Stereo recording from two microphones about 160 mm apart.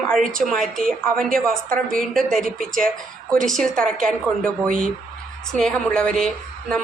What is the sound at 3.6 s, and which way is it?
A woman's voice, 5° left (ahead or behind).